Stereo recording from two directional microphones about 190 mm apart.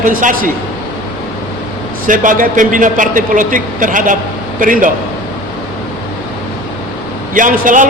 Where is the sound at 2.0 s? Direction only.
45° right (ahead or behind).